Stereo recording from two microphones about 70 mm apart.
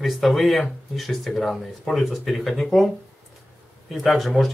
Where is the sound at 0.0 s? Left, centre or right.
Centre.